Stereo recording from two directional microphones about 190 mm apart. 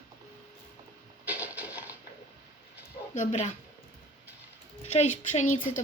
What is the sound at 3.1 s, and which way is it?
Speech, 35° left (ahead or behind).